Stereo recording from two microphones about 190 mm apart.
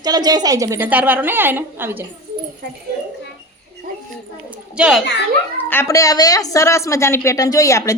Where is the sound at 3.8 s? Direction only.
50° right (ahead or behind).